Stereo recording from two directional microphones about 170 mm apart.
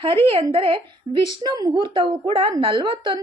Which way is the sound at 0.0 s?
30° right (ahead or behind).